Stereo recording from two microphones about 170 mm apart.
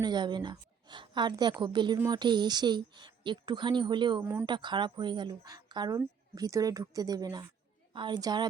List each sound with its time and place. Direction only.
0.0 s a woman's voice: 25° right (ahead or behind)